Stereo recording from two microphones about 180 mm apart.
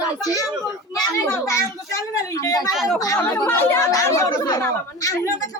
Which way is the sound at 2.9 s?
20° left (ahead or behind).